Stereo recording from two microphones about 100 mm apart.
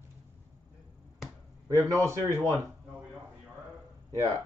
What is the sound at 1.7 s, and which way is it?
Speech, 30° right (ahead or behind).